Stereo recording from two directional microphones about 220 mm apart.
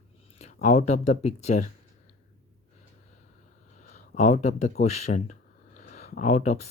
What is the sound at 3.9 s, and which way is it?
Speech, 30° left (ahead or behind).